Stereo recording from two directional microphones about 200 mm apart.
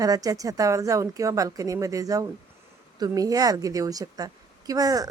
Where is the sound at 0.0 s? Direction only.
20° right (ahead or behind).